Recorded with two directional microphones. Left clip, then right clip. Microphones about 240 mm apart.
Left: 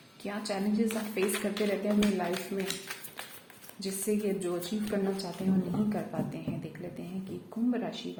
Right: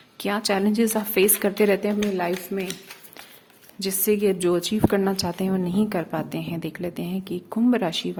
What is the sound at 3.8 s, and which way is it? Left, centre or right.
A woman's voice, right.